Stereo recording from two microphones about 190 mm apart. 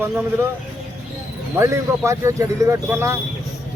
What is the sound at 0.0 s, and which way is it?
Speech, 10° right (ahead or behind).